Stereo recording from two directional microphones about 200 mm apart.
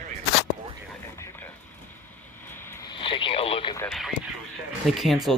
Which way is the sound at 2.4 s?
10° left (ahead or behind).